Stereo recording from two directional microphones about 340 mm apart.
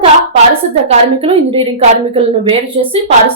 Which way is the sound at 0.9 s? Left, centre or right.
Centre.